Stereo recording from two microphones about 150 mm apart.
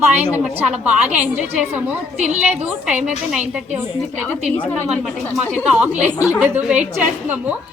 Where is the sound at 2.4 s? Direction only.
10° right (ahead or behind).